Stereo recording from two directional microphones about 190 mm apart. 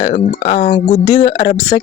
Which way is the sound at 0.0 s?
35° left (ahead or behind).